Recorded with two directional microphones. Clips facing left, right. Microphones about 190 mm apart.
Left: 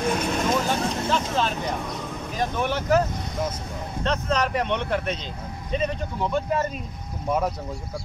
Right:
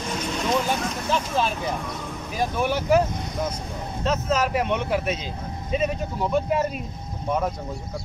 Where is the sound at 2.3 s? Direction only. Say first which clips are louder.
Right 2 dB; 10° right (ahead or behind).